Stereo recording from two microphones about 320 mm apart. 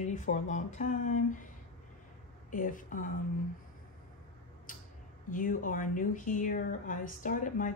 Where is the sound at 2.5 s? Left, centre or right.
Left.